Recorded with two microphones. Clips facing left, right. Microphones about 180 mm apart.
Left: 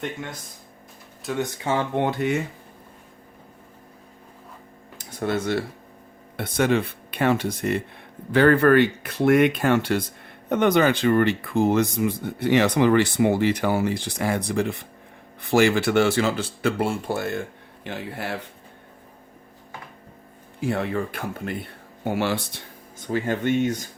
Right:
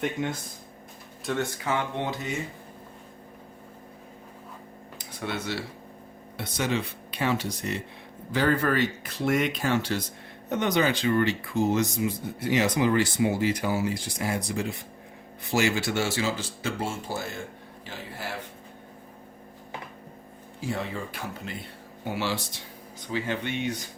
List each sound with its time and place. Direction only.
1.3 s speech: 5° left (ahead or behind)
1.7 s speech: 30° left (ahead or behind)
2.0 s speech: 60° left (ahead or behind)
4.9 s speech: 45° left (ahead or behind)
20.6 s speech: 60° left (ahead or behind); by 23.9 s 45° left (ahead or behind)